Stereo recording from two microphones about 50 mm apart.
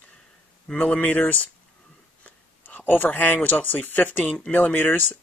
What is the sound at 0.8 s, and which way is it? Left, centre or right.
Speech, left.